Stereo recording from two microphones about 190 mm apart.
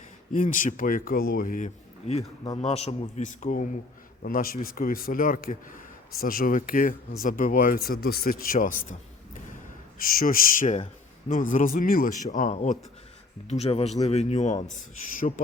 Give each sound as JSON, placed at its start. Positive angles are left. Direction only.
{"t": 0.3, "sound": "speech", "side_deg": 45}
{"t": 10.0, "sound": "speech", "side_deg": 50}